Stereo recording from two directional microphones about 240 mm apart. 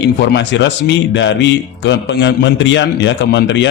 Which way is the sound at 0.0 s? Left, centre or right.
Left.